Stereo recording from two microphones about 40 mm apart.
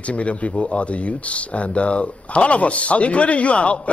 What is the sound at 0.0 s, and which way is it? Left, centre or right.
Speech, left.